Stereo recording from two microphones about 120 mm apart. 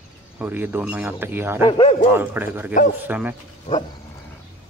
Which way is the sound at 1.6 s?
45° left (ahead or behind).